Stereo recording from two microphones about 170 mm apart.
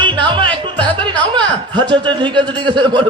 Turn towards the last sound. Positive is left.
turn(degrees=-30)  # may be behind; listen again after turning